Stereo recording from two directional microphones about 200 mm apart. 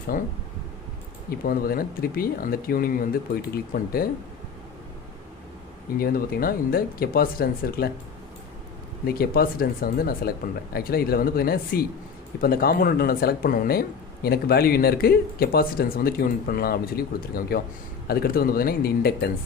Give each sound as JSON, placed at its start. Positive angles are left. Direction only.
{"t": 0.1, "sound": "speech", "side_deg": 45}
{"t": 1.5, "sound": "speech", "side_deg": 45}
{"t": 6.0, "sound": "speech", "side_deg": 50}
{"t": 9.0, "sound": "speech", "side_deg": 50}